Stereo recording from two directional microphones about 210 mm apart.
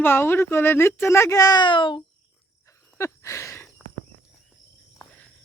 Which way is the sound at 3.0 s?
15° left (ahead or behind).